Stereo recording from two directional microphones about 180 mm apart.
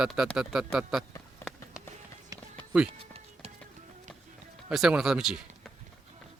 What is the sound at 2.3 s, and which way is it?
Music, 20° right (ahead or behind).